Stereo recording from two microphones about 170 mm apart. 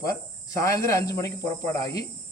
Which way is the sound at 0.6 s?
20° left (ahead or behind).